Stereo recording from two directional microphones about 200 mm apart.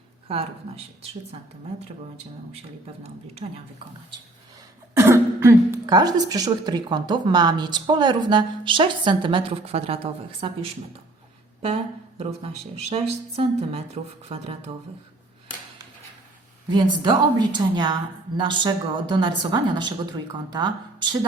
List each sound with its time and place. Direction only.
3.4 s speech: 30° right (ahead or behind)
4.9 s speech: 15° right (ahead or behind)
12.2 s speech: 30° right (ahead or behind)
16.6 s speech: 20° right (ahead or behind)